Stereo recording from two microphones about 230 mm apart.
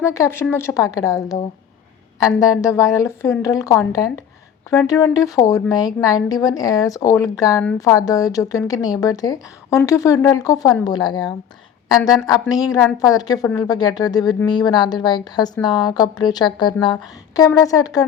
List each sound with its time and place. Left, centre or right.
0.0 s a woman's voice: centre